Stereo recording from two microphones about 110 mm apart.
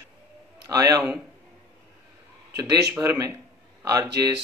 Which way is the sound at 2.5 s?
30° right (ahead or behind).